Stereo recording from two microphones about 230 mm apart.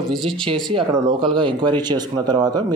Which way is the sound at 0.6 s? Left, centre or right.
Centre.